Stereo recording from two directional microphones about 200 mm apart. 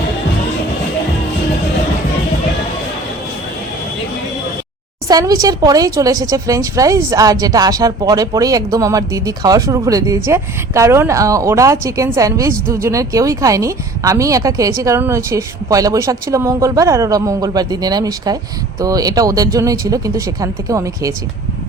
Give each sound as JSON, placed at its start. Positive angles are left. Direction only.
{"t": 5.0, "sound": "speech", "side_deg": -15}